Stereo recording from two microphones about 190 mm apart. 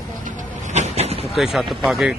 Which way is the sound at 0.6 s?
40° right (ahead or behind).